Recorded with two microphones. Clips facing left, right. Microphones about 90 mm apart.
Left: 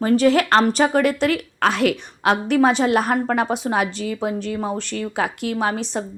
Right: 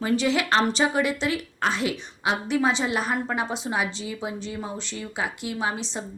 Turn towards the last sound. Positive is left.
turn(degrees=55)  # may be behind; listen again after turning